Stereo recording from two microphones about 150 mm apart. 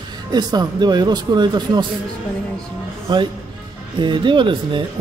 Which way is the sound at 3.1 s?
30° right (ahead or behind).